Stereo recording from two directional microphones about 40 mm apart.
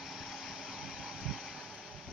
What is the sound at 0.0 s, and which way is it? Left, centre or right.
Vehicle, centre.